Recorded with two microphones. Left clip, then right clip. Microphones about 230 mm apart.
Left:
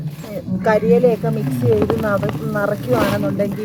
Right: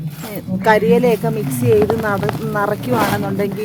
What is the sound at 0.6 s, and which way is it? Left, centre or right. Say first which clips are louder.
Speech: right 1 dB; right.